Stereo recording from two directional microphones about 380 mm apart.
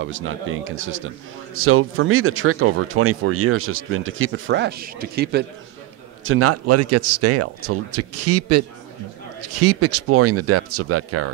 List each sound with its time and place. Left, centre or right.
0.0 s a man's voice: right